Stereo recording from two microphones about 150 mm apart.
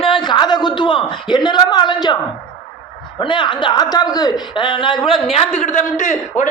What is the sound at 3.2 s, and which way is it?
Speech, 30° left (ahead or behind).